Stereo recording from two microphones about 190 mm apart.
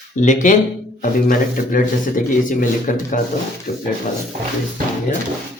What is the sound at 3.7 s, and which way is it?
Speech, 35° left (ahead or behind).